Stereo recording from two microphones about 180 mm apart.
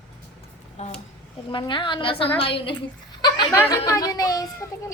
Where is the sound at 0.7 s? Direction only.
35° left (ahead or behind); by 4.6 s 20° left (ahead or behind).